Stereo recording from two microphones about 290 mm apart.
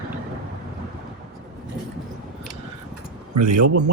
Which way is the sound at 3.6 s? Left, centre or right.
Right.